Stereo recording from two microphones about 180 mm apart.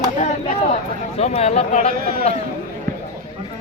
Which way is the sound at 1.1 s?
35° left (ahead or behind).